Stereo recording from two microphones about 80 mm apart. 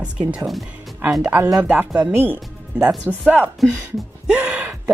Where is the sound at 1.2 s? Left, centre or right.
Right.